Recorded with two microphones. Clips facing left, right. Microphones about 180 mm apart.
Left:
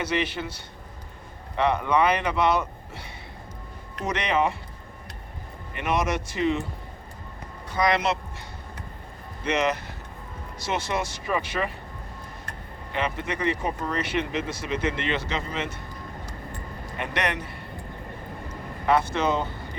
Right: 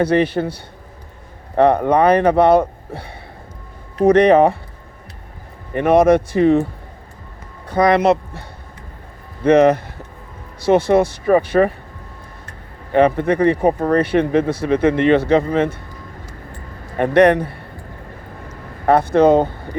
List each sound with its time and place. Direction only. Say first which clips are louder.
0.0 s speech: right 12 dB; 55° right (ahead or behind)
5.8 s speech: right 14 dB; 55° right (ahead or behind)
7.7 s speech: right 10 dB; 55° right (ahead or behind)
12.9 s speech: right 15 dB; 50° right (ahead or behind)
17.0 s speech: right 17 dB; 55° right (ahead or behind)
18.9 s speech: right 11 dB; 55° right (ahead or behind)